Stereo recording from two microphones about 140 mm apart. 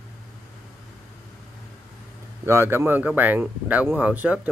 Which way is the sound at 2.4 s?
15° right (ahead or behind).